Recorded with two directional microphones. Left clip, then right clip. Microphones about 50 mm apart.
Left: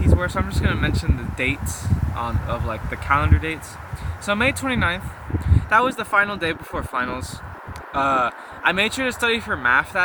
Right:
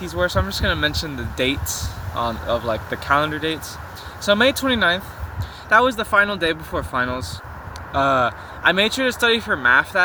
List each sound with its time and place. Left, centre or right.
0.2 s speech: left
7.9 s speech: left